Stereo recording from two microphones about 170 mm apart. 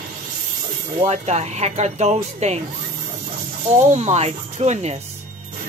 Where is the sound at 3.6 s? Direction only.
45° right (ahead or behind).